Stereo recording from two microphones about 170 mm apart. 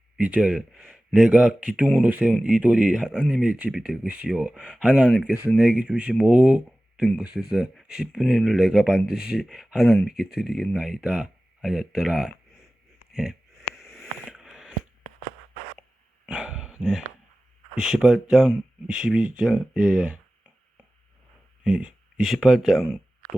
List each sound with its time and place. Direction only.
0.2 s speech: 5° right (ahead or behind)
13.1 s a sound: 5° right (ahead or behind)
16.2 s dog: 5° right (ahead or behind)
17.7 s speech: 5° right (ahead or behind)
21.6 s speech: 5° right (ahead or behind)